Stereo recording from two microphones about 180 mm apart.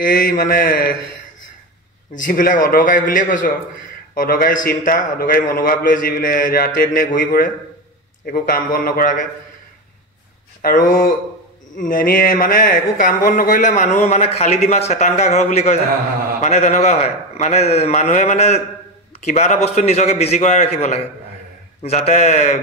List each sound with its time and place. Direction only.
0.0 s speech: 50° left (ahead or behind)
2.2 s speech: 50° left (ahead or behind)
10.6 s a man's voice: 50° left (ahead or behind)